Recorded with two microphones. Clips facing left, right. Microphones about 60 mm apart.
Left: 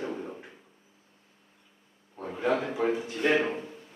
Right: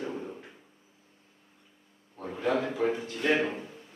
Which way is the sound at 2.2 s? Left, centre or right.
Centre.